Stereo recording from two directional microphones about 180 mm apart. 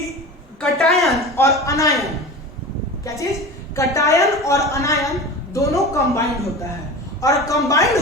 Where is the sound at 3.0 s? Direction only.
15° left (ahead or behind).